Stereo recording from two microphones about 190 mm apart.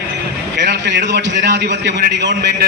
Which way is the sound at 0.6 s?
65° right (ahead or behind).